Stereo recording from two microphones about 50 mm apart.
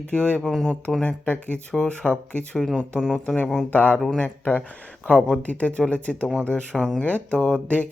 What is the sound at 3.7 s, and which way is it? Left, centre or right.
Speech, left.